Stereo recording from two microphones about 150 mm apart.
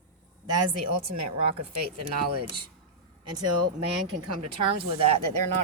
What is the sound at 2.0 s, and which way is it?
Speech, 40° right (ahead or behind).